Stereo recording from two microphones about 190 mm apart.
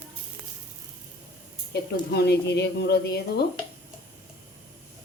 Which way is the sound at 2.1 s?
60° left (ahead or behind).